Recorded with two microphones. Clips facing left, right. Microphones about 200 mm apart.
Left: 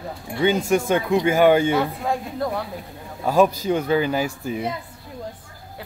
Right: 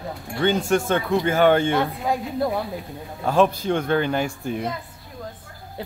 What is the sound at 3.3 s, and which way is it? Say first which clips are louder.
Speech: left 1 dB; 10° left (ahead or behind).